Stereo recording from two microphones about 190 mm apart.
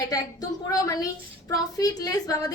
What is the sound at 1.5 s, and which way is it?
Speech, 20° left (ahead or behind).